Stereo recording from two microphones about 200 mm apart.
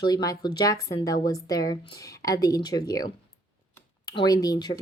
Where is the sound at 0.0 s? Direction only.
20° left (ahead or behind).